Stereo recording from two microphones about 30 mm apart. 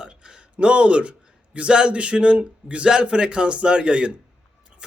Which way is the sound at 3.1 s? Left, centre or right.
Right.